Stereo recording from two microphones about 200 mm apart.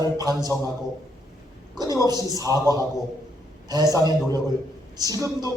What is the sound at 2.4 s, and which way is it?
Speech, 20° right (ahead or behind).